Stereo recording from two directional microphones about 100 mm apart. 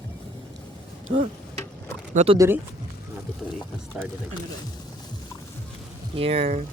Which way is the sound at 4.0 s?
10° right (ahead or behind).